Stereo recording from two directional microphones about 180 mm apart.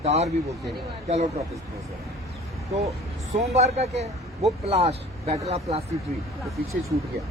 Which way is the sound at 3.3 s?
35° right (ahead or behind).